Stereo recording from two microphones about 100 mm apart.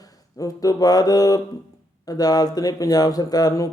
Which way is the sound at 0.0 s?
35° left (ahead or behind).